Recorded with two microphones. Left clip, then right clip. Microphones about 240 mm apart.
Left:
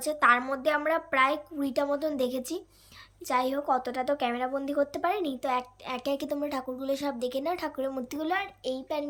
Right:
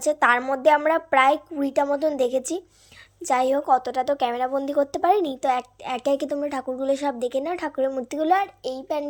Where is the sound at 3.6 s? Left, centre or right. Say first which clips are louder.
Right 7 dB; right.